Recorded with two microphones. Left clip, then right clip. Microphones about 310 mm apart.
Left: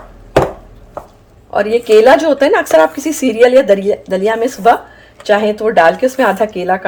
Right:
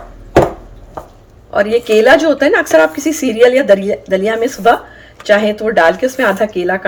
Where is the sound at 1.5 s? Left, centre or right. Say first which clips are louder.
Left 2 dB; centre.